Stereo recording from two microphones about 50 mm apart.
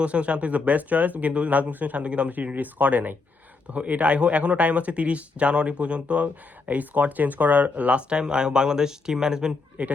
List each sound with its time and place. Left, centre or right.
0.0 s speech: right
9.8 s speech: right